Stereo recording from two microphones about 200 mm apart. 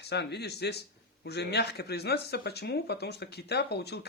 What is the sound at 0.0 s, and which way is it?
Speech, 55° left (ahead or behind).